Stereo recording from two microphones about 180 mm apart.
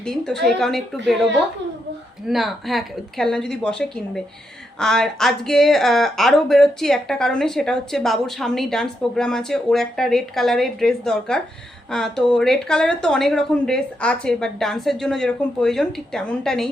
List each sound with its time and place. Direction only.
0.0 s speech: 5° left (ahead or behind)